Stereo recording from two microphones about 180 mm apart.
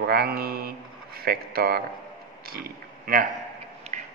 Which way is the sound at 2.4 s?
55° right (ahead or behind).